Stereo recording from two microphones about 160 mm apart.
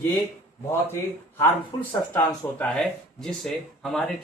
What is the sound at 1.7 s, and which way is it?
Speech, 25° left (ahead or behind).